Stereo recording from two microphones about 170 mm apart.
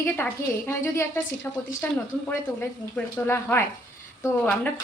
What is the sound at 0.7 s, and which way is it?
Speech, 15° left (ahead or behind).